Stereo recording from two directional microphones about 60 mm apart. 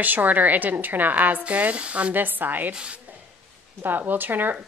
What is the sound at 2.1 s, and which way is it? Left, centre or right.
Speech, right.